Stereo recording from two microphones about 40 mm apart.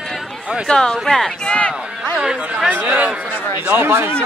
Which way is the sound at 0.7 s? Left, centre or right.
Centre.